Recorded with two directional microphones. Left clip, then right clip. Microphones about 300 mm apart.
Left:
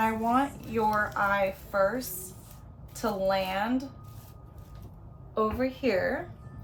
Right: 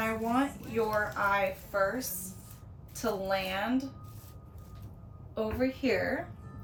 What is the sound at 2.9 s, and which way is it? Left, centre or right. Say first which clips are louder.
Speech: left 4 dB; centre.